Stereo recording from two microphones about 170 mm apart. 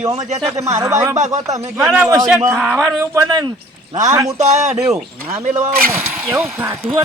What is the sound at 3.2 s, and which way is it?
Speech, 25° right (ahead or behind).